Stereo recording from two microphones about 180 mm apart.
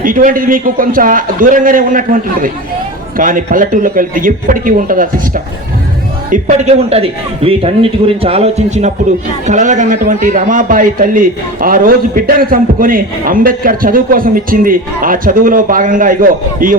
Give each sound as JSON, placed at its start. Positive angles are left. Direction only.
{"t": 0.0, "sound": "a man's voice", "side_deg": -50}
{"t": 6.3, "sound": "a man's voice", "side_deg": -40}